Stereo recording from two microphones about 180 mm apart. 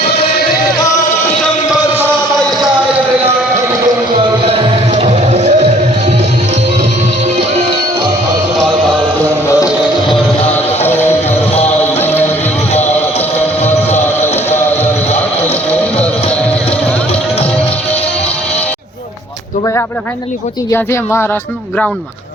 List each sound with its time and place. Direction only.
4.4 s music: 30° right (ahead or behind)
10.8 s music: 10° left (ahead or behind)
13.7 s music: 10° left (ahead or behind)
20.7 s speech: 15° left (ahead or behind)